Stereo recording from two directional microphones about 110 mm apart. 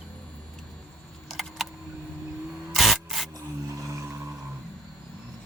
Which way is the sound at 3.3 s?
30° right (ahead or behind).